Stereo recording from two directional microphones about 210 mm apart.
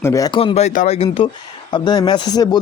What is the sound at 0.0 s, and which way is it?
Speech, 15° left (ahead or behind).